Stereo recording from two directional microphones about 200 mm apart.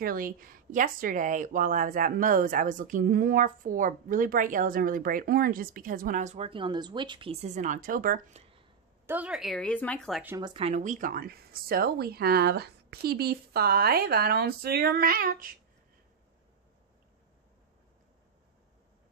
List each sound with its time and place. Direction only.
0.0 s speech: 45° right (ahead or behind)
9.0 s a woman's voice: 10° right (ahead or behind)
10.2 s speech: 15° right (ahead or behind)
10.5 s speech: 30° right (ahead or behind)